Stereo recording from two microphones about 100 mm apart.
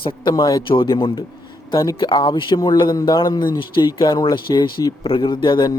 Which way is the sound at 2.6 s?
40° left (ahead or behind).